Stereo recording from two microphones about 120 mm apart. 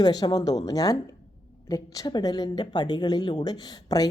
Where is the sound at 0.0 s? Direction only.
35° left (ahead or behind).